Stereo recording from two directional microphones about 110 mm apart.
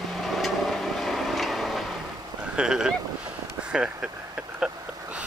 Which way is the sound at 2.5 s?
5° right (ahead or behind).